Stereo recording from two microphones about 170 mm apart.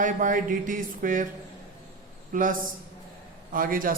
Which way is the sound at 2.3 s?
50° right (ahead or behind).